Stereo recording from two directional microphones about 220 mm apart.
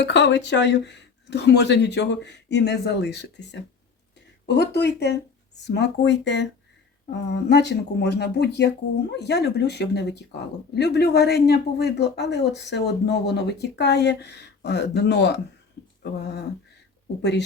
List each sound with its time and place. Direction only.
0.0 s speech: 55° left (ahead or behind)